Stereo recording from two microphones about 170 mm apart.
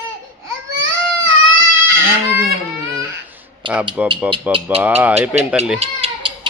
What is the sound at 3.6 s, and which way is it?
Speech, 30° right (ahead or behind).